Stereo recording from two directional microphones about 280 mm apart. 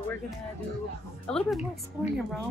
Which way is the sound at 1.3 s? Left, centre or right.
Centre.